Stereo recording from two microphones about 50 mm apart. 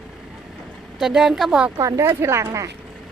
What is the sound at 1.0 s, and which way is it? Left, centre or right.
Speech, centre.